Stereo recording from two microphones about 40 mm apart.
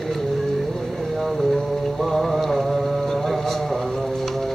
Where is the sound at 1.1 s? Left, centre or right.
Centre.